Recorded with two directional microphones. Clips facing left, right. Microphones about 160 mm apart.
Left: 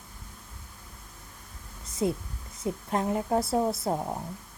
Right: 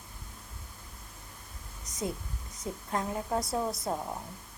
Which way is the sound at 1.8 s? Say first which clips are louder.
Left 7 dB; 25° left (ahead or behind).